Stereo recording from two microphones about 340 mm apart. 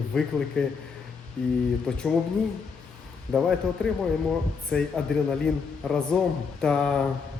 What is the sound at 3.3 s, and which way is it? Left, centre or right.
A man's voice, centre.